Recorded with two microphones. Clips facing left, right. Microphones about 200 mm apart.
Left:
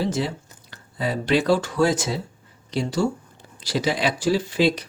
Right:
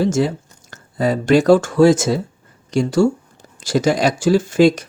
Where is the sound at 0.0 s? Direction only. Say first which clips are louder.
Right 7 dB; 45° right (ahead or behind).